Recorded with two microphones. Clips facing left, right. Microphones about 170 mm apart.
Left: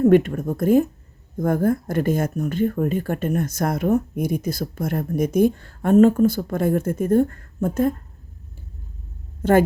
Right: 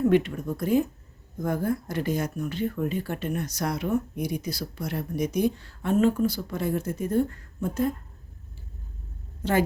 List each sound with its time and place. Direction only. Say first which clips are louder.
0.0 s speech: left 6 dB; 50° left (ahead or behind)
9.4 s a woman's voice: left 8 dB; 50° left (ahead or behind)